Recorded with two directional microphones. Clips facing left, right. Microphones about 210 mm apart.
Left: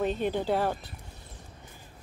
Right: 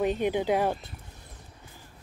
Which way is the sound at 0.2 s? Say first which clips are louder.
Right 2 dB; 15° right (ahead or behind).